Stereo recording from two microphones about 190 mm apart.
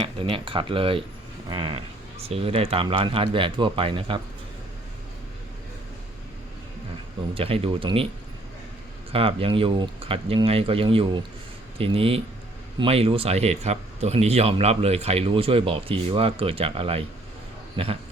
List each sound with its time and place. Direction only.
0.0 s speech: 25° right (ahead or behind)
7.3 s speech: 30° right (ahead or behind)
9.1 s speech: 30° right (ahead or behind)